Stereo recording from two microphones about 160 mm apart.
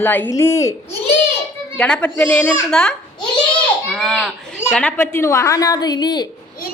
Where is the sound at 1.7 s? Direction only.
5° left (ahead or behind).